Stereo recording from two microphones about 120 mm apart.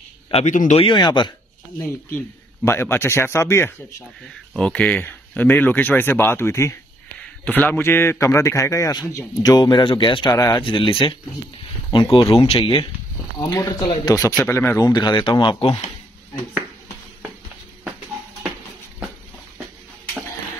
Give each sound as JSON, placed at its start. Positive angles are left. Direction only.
{"t": 0.3, "sound": "speech", "side_deg": 75}
{"t": 0.7, "sound": "speech", "side_deg": 40}
{"t": 1.8, "sound": "a man's voice", "side_deg": 20}
{"t": 4.3, "sound": "speech", "side_deg": 10}
{"t": 7.2, "sound": "a man's voice", "side_deg": 10}
{"t": 10.3, "sound": "a man's voice", "side_deg": 30}
{"t": 10.6, "sound": "speech", "side_deg": 45}
{"t": 13.4, "sound": "a man's voice", "side_deg": 30}
{"t": 14.8, "sound": "speech", "side_deg": 35}